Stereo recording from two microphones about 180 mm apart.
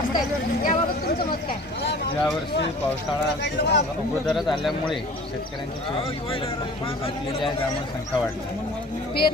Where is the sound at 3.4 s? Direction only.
70° left (ahead or behind).